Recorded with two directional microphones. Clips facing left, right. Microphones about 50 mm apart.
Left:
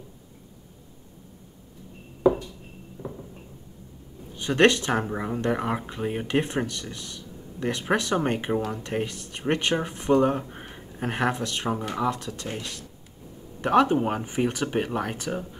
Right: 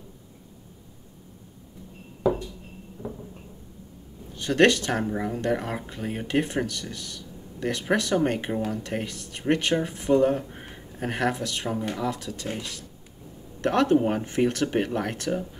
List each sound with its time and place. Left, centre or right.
3.0 s a sound: left
4.4 s speech: centre
13.6 s speech: centre